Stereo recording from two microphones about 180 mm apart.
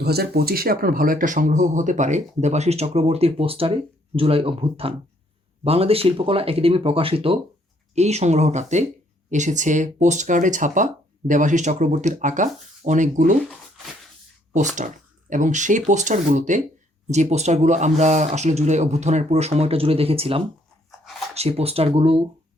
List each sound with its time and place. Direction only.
0.0 s speech: 60° right (ahead or behind); by 13.3 s 45° right (ahead or behind)
14.8 s speech: 45° right (ahead or behind)